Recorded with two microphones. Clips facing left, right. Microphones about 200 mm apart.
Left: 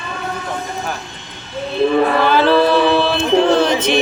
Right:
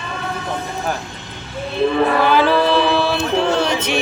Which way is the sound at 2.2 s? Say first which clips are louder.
Left 1 dB; 10° right (ahead or behind).